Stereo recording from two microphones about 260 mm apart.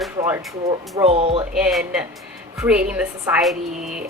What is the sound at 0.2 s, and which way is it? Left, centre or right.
Speech, centre.